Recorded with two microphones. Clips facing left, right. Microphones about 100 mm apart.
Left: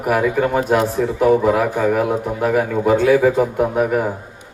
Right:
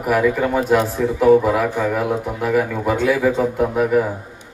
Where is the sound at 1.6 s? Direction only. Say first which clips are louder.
Left 2 dB; 40° left (ahead or behind).